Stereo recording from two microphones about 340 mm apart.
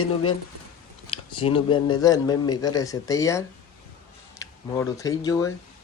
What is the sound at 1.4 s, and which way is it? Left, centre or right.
Speech, centre.